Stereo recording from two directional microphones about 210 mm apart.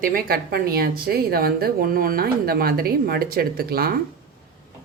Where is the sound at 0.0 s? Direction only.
45° right (ahead or behind).